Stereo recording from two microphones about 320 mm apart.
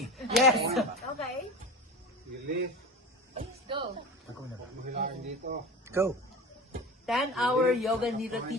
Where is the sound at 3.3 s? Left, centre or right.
Centre.